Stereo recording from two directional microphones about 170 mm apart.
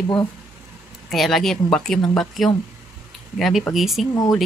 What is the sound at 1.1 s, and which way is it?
Speech, centre (ahead or behind).